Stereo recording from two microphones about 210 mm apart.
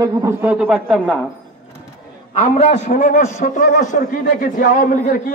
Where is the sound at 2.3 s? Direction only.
30° left (ahead or behind).